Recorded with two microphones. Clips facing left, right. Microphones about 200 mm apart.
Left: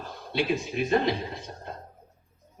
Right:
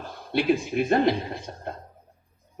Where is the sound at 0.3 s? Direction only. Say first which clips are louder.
Right 4 dB; 55° right (ahead or behind).